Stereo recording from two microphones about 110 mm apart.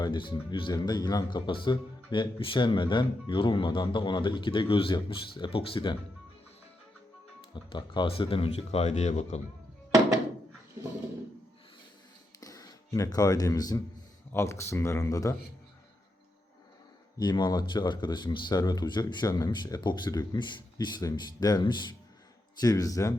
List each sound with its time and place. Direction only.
0.0 s speech: 45° left (ahead or behind)
0.7 s speech: 40° left (ahead or behind)
7.5 s speech: 45° left (ahead or behind); by 9.4 s 90° left
12.4 s speech: 30° left (ahead or behind)
17.2 s speech: 40° left (ahead or behind)
22.6 s speech: 35° left (ahead or behind)